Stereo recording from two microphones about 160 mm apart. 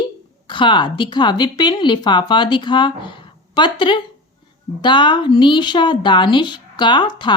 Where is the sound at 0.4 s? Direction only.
30° left (ahead or behind).